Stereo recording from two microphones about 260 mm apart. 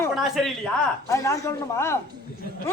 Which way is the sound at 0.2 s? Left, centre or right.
Centre.